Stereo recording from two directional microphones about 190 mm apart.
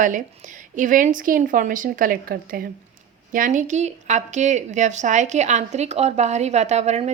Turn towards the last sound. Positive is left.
turn(degrees=-35)  # may be behind; listen again after turning